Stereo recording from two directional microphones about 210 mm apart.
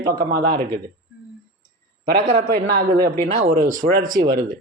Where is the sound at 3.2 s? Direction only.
40° right (ahead or behind).